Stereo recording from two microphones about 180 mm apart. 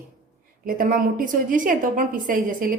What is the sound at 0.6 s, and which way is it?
A woman's voice, 50° right (ahead or behind).